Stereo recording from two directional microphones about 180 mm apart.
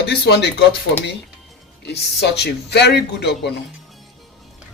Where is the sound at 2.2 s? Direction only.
65° left (ahead or behind).